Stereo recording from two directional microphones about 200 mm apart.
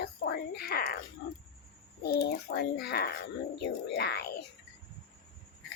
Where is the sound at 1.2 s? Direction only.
55° left (ahead or behind).